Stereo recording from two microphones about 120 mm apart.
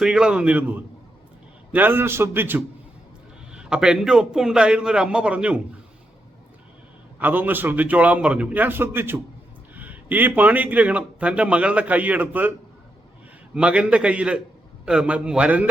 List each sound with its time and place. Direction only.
0.0 s a man's voice: 5° right (ahead or behind)
3.5 s a man's voice: 5° right (ahead or behind)
7.2 s a man's voice: 15° right (ahead or behind)
13.6 s a man's voice: 10° right (ahead or behind)